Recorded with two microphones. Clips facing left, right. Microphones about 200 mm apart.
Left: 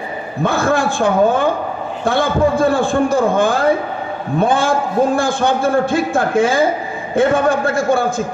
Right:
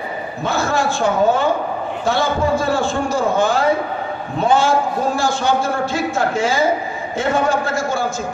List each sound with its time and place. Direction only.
0.4 s a man's voice: 55° left (ahead or behind)